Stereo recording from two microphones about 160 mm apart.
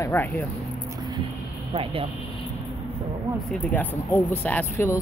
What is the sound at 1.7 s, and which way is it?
Speech, 35° right (ahead or behind).